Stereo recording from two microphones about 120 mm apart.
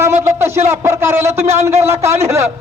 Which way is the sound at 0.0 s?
20° right (ahead or behind).